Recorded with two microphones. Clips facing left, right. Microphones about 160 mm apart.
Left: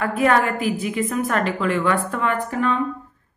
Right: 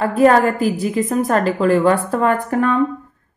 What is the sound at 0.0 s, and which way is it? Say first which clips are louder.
A woman's voice: right 6 dB; 35° right (ahead or behind).